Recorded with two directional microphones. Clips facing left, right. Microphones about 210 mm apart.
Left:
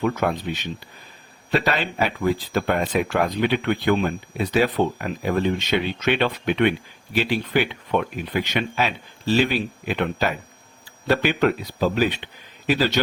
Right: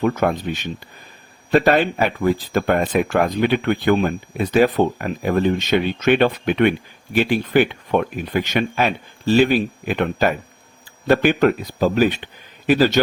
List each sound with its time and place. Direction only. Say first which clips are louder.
0.0 s speech: right 4 dB; 45° right (ahead or behind)